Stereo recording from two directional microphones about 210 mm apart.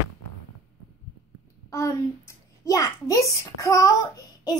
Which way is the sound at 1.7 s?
15° left (ahead or behind).